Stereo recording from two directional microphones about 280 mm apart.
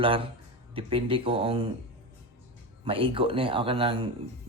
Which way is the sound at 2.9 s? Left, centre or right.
Centre.